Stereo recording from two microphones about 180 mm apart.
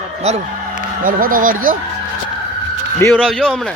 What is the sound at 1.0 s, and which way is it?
Speech, 50° right (ahead or behind).